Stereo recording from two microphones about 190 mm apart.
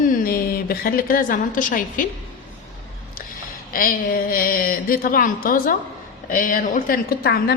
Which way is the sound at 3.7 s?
50° left (ahead or behind).